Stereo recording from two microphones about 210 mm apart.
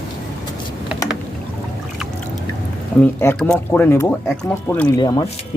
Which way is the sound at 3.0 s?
5° left (ahead or behind).